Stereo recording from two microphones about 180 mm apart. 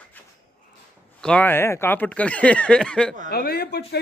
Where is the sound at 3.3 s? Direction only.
60° left (ahead or behind).